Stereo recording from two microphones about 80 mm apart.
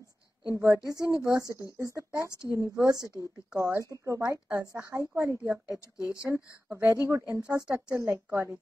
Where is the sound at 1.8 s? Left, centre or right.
Right.